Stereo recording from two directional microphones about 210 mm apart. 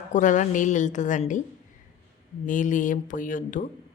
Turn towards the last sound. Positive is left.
turn(degrees=40)  # may be behind; listen again after turning